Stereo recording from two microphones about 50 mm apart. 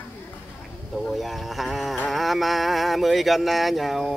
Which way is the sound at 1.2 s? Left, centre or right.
Centre.